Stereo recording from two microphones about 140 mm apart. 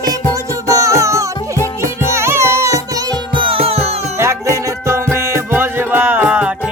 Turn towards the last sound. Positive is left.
turn(degrees=-10)  # may be behind; listen again after turning